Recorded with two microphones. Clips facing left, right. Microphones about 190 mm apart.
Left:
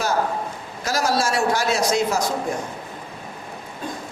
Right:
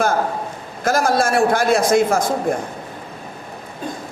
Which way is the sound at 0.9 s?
55° right (ahead or behind).